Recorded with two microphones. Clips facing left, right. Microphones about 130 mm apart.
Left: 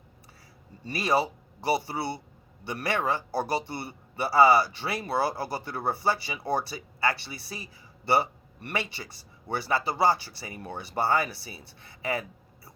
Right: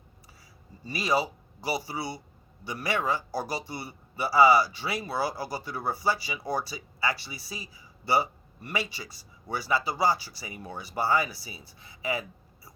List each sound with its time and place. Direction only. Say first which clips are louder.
0.9 s a man's voice: left 1 dB; 55° left (ahead or behind)